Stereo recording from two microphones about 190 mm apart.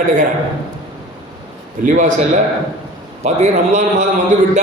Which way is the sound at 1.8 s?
40° right (ahead or behind).